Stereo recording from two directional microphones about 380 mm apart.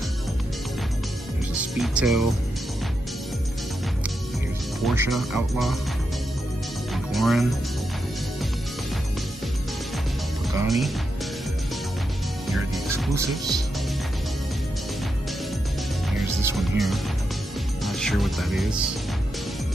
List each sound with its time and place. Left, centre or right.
1.8 s speech: centre
4.8 s speech: centre
6.9 s music: centre
10.5 s music: centre
12.4 s music: centre
16.4 s speech: centre